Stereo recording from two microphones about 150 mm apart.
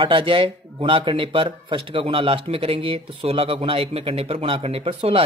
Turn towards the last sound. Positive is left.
turn(degrees=-40)  # may be behind; listen again after turning